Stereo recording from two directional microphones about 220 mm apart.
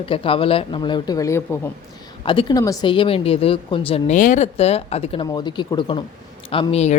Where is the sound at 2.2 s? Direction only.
20° left (ahead or behind).